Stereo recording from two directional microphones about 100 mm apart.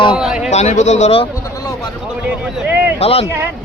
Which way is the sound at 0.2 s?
10° right (ahead or behind).